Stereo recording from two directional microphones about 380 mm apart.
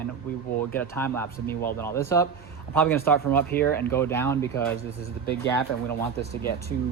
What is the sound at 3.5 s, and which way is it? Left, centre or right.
Speech, left.